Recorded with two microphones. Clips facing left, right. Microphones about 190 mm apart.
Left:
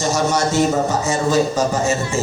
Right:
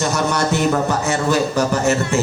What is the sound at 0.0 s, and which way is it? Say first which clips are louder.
A man's voice: left 1 dB; 60° right (ahead or behind).